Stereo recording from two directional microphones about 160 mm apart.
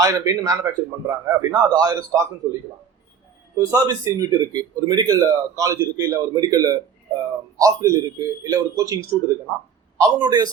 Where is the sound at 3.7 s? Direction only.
20° right (ahead or behind).